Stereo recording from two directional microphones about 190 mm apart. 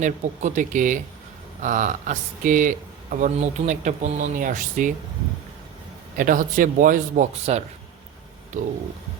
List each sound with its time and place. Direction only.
0.0 s speech: 40° right (ahead or behind)
6.1 s speech: 45° right (ahead or behind)